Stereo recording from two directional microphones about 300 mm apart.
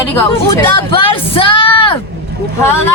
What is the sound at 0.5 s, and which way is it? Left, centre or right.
Speech, centre.